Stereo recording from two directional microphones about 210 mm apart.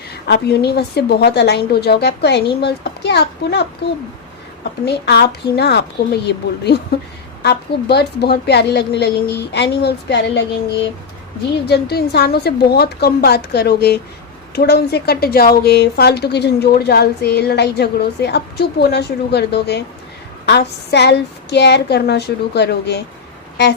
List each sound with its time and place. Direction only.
0.3 s a woman's voice: 50° left (ahead or behind)
4.9 s a woman's voice: 50° left (ahead or behind)
11.6 s a woman's voice: 50° left (ahead or behind)